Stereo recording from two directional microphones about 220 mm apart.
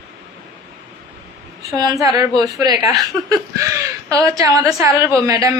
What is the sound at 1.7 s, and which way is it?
Speech, 20° right (ahead or behind).